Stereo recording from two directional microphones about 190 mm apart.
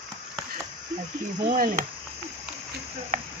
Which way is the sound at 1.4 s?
45° right (ahead or behind).